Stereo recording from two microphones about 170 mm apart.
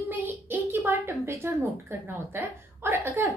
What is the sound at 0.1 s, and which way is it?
A woman's voice, 15° right (ahead or behind).